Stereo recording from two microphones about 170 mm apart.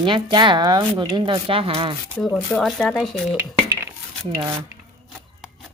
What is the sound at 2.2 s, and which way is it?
Speech, centre (ahead or behind).